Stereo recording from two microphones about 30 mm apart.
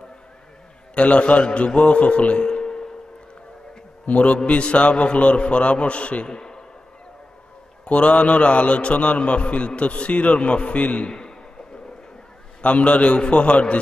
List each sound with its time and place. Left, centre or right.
0.9 s a man's voice: left
4.1 s a man's voice: left
6.2 s a man's voice: left
7.8 s a man's voice: left
11.1 s a sound: left
12.6 s a man's voice: left